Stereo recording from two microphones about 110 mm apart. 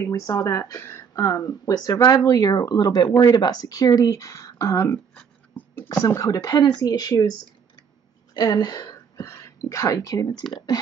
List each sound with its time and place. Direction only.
0.0 s speech: 35° left (ahead or behind)
5.5 s a sound: 15° left (ahead or behind)
5.9 s speech: 30° left (ahead or behind)
8.4 s speech: 40° left (ahead or behind)